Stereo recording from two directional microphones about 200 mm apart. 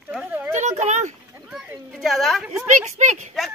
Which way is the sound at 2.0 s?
Centre (ahead or behind).